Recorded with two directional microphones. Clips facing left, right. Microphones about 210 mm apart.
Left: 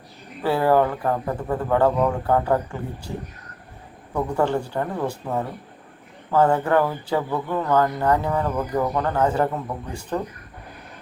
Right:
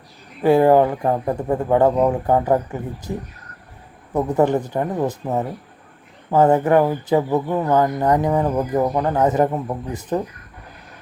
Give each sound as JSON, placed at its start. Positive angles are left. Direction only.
{"t": 0.4, "sound": "speech", "side_deg": -20}
{"t": 4.1, "sound": "speech", "side_deg": -20}